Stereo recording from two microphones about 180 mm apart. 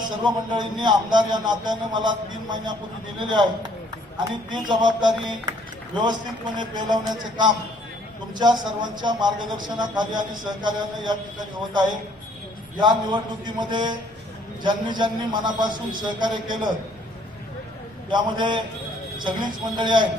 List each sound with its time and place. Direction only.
0.2 s a man's voice: 25° right (ahead or behind)
4.5 s a man's voice: 25° right (ahead or behind)
6.6 s a man's voice: 25° right (ahead or behind)
18.1 s a man's voice: 25° right (ahead or behind)